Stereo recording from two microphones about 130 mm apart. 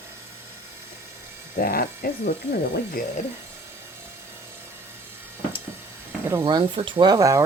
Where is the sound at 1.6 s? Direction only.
90° left.